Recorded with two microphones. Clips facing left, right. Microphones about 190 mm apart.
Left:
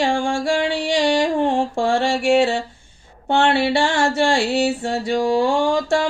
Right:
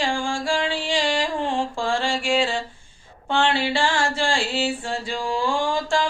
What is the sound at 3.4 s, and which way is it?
Mantra, 70° left (ahead or behind).